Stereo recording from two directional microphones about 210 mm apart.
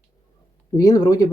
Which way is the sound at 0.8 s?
15° left (ahead or behind).